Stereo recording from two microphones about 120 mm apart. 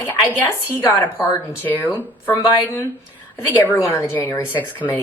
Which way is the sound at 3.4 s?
15° left (ahead or behind).